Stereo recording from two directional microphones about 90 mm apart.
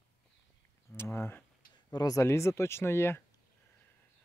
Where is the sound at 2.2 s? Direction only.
30° left (ahead or behind).